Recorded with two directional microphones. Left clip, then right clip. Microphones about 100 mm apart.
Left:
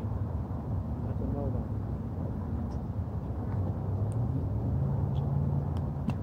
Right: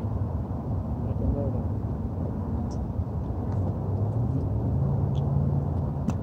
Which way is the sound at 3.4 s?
5° right (ahead or behind).